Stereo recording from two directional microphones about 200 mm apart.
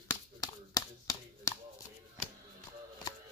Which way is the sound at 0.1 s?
20° left (ahead or behind).